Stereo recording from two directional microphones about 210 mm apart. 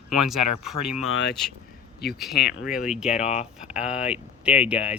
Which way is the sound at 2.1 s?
Centre (ahead or behind).